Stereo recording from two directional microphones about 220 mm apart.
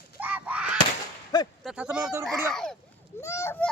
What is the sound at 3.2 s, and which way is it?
Speech, 10° left (ahead or behind).